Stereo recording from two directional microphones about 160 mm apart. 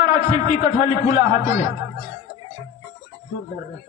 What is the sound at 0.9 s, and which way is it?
Speech, 50° left (ahead or behind).